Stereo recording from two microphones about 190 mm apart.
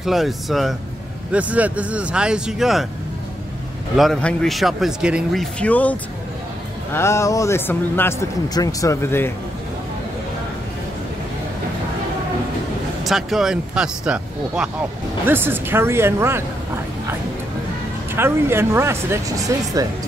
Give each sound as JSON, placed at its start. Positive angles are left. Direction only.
{"t": 0.0, "sound": "speech", "side_deg": 0}
{"t": 3.9, "sound": "speech", "side_deg": 0}
{"t": 13.0, "sound": "speech", "side_deg": 0}
{"t": 18.1, "sound": "speech", "side_deg": -10}